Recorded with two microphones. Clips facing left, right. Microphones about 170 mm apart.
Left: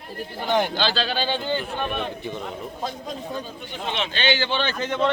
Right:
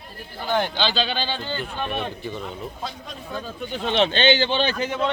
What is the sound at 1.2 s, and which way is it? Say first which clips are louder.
Speech: left 4 dB; 15° left (ahead or behind).